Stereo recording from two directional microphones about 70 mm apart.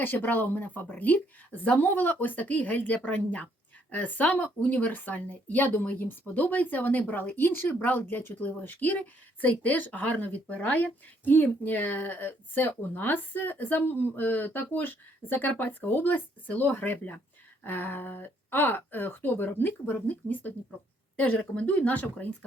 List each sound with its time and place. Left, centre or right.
0.0 s a woman's voice: left